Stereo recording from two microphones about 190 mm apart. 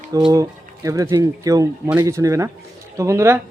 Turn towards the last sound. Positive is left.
turn(degrees=-15)  # may be behind; listen again after turning